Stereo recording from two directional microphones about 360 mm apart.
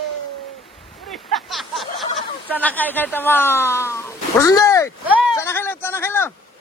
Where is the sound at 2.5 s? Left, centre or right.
Centre.